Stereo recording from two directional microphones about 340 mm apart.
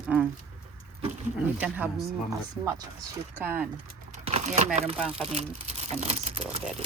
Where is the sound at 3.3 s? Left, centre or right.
Centre.